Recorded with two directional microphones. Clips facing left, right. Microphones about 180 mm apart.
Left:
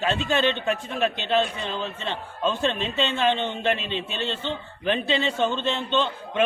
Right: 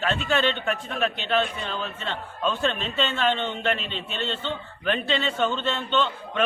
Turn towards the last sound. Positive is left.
turn(degrees=15)  # may be behind; listen again after turning